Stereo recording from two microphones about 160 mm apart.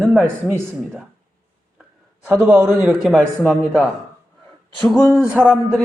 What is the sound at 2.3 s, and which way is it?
A man's voice, 10° right (ahead or behind).